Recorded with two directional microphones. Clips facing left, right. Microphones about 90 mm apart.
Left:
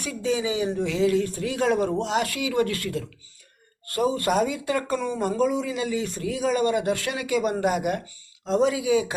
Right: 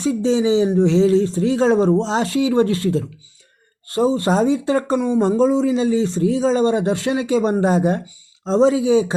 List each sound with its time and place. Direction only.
0.0 s a man's voice: 25° right (ahead or behind)